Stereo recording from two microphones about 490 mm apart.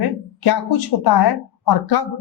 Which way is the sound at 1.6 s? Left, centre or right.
Left.